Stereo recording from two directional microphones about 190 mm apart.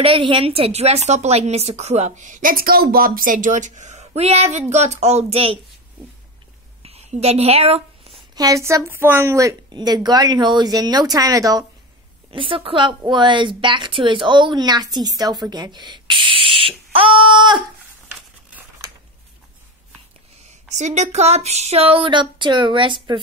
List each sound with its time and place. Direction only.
0.0 s a woman's voice: 30° right (ahead or behind)
6.8 s a sound: 35° right (ahead or behind)
8.4 s a woman's voice: 15° right (ahead or behind)
20.7 s a woman's voice: 40° right (ahead or behind)